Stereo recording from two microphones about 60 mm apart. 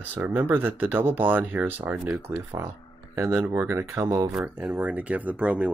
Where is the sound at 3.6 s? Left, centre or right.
Right.